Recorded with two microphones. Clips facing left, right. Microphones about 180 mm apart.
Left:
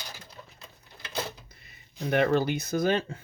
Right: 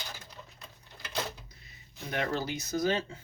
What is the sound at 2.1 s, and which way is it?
Speech, 60° left (ahead or behind).